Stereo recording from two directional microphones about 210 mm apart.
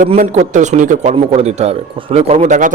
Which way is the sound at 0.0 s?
35° right (ahead or behind).